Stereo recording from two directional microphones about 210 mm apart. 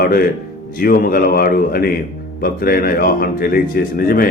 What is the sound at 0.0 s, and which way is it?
Speech, 45° left (ahead or behind).